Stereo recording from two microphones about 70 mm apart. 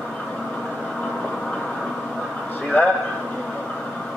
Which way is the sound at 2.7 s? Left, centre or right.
Left.